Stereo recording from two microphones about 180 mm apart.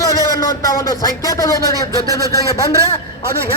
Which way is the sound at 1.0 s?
20° left (ahead or behind).